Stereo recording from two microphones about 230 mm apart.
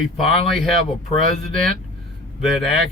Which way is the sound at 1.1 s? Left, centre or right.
Left.